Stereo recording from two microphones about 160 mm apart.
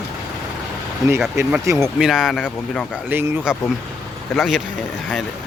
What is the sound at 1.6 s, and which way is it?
Speech, 20° right (ahead or behind).